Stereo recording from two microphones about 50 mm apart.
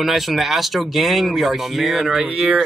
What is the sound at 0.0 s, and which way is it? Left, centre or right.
Speech, centre.